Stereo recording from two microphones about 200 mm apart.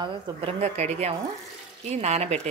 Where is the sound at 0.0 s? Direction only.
25° right (ahead or behind).